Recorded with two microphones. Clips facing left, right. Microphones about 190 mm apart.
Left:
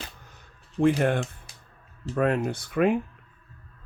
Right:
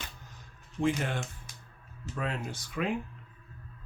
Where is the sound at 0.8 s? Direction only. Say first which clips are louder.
Left 8 dB; 55° left (ahead or behind).